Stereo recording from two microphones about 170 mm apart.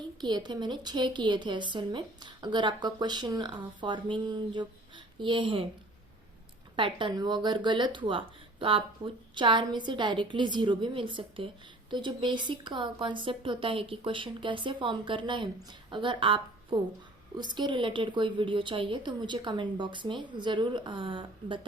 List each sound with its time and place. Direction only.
0.2 s speech: 25° right (ahead or behind)
6.7 s a woman's voice: 30° right (ahead or behind)